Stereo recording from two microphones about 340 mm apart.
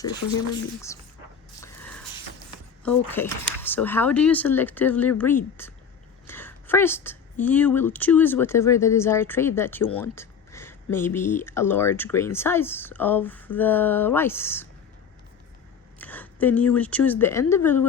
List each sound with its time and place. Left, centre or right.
1.6 s a sound: centre
2.8 s a woman's voice: centre
16.0 s a woman's voice: centre